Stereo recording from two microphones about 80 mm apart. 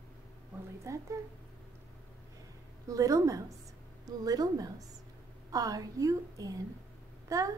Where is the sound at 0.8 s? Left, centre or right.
Right.